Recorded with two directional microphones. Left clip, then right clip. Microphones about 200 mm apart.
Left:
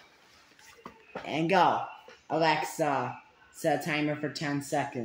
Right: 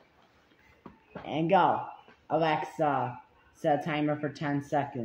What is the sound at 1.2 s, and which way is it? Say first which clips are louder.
Speech: even; centre (ahead or behind).